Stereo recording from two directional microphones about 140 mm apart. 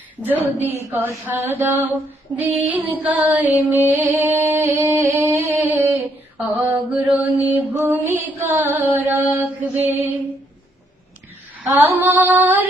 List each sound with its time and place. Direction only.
0.2 s music: 15° right (ahead or behind)
11.6 s female singing: 15° right (ahead or behind)
11.9 s music: 15° right (ahead or behind)